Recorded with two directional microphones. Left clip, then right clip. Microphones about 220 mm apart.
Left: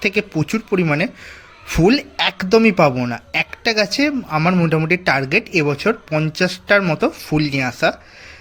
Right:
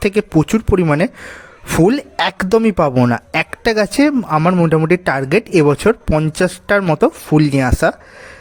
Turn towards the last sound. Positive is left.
turn(degrees=-45)  # may be behind; listen again after turning